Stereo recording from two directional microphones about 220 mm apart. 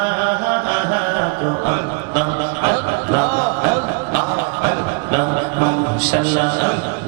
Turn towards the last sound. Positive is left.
turn(degrees=-15)  # may be behind; listen again after turning